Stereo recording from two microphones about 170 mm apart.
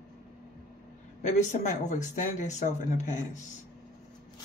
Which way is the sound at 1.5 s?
45° left (ahead or behind).